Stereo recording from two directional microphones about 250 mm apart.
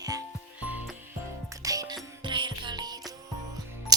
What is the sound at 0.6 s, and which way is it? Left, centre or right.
Music, centre.